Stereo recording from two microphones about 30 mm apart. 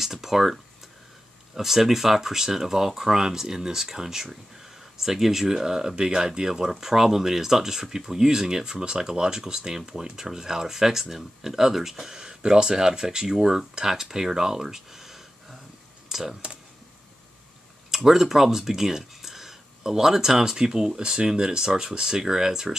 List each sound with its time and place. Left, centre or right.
0.0 s speech: centre
17.9 s speech: centre